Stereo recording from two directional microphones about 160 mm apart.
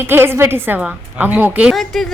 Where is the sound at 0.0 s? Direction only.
15° right (ahead or behind).